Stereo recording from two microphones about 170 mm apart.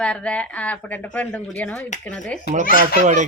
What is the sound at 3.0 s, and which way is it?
Speech, 45° right (ahead or behind).